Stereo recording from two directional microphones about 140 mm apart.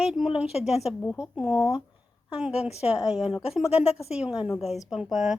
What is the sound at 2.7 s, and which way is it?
Speech, 45° left (ahead or behind).